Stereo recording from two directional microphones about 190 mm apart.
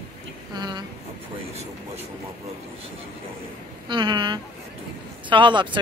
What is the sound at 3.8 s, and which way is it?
Speech, 25° right (ahead or behind).